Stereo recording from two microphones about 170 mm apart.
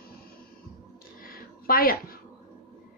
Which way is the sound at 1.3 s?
60° left (ahead or behind).